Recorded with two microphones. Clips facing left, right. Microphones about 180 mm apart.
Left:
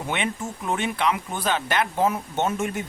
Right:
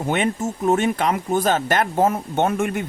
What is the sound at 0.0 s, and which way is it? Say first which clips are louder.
Speech: right 6 dB; 45° right (ahead or behind).